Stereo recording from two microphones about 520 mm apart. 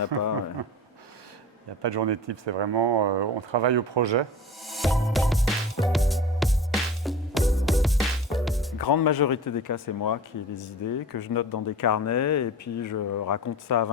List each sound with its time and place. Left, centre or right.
0.1 s speech: right
1.8 s speech: right
4.6 s music: centre
8.8 s speech: left